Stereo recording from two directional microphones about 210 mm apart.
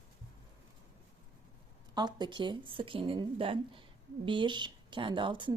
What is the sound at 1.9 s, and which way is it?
A woman's voice, 20° right (ahead or behind).